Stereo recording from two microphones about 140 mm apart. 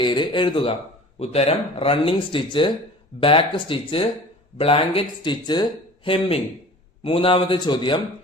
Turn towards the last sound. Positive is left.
turn(degrees=35)  # may be behind; listen again after turning